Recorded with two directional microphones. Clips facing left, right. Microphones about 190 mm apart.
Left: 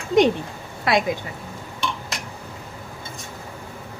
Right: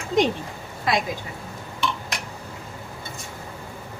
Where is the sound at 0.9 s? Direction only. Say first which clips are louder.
Left 3 dB; 65° left (ahead or behind).